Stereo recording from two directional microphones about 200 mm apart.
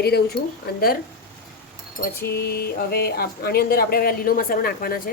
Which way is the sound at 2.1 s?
50° left (ahead or behind).